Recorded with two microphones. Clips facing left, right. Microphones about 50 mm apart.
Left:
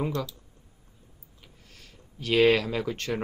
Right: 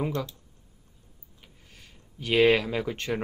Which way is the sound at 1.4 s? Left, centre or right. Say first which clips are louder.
Even; centre.